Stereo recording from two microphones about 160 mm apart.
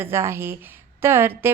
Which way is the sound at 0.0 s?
15° right (ahead or behind).